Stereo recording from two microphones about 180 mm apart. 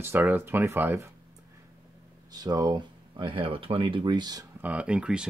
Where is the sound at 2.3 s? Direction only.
20° right (ahead or behind).